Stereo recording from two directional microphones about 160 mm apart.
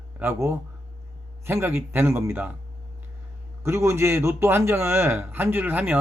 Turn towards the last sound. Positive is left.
turn(degrees=-10)  # may be behind; listen again after turning